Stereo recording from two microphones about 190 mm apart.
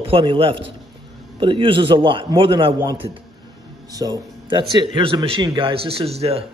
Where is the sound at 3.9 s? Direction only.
20° right (ahead or behind).